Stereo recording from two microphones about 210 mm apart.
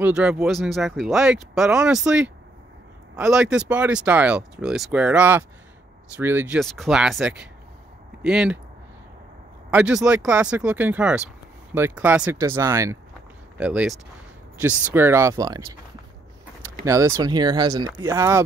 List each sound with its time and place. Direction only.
0.0 s speech: 5° right (ahead or behind)
9.7 s speech: 5° right (ahead or behind)
15.0 s speech: 10° right (ahead or behind)
16.8 s speech: 15° right (ahead or behind)